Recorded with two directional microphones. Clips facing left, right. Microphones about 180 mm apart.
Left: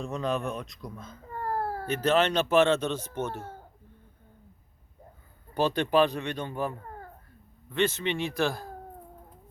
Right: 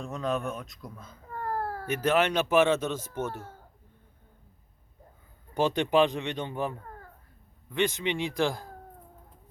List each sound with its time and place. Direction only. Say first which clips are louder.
0.0 s speech: left 1 dB; centre (ahead or behind)
1.4 s baby cry: left 1 dB; 30° left (ahead or behind)
1.9 s a man's voice: left 1 dB; 10° right (ahead or behind)
5.5 s a man's voice: even; 15° right (ahead or behind)